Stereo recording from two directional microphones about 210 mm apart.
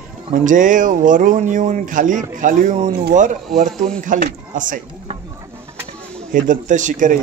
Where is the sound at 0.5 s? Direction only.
40° right (ahead or behind).